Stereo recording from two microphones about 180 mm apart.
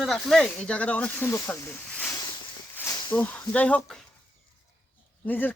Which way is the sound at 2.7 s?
15° left (ahead or behind).